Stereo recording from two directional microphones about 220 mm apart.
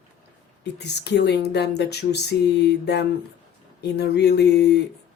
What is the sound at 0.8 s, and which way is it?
Speech, 50° left (ahead or behind).